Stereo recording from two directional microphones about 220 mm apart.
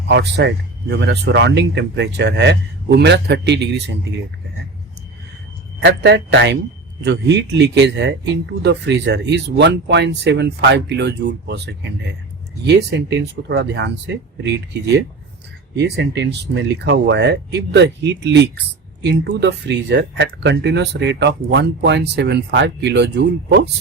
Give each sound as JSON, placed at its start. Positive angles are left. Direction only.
{"t": 0.1, "sound": "speech", "side_deg": -50}
{"t": 5.8, "sound": "speech", "side_deg": -50}